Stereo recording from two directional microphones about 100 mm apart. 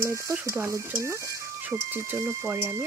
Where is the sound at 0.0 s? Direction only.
30° right (ahead or behind).